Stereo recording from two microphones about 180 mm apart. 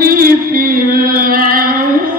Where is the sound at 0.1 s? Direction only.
55° right (ahead or behind).